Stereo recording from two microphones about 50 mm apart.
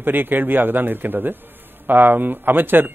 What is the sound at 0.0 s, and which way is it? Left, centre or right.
A man's voice, right.